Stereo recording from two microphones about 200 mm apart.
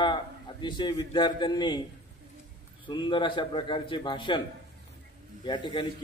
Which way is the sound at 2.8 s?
25° left (ahead or behind).